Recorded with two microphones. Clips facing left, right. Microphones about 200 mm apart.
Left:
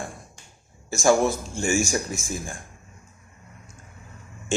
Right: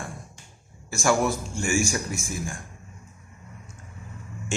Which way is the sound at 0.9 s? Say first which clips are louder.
Left 3 dB; 25° left (ahead or behind).